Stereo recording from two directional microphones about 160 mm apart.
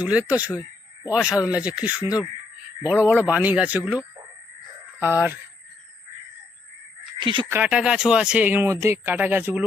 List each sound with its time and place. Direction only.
0.0 s speech: 10° right (ahead or behind)
4.9 s speech: 10° right (ahead or behind)
7.2 s speech: 30° right (ahead or behind)
7.5 s speech: 5° right (ahead or behind)